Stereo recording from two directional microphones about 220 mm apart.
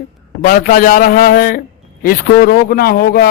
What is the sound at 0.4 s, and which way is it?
A man's voice, 40° left (ahead or behind).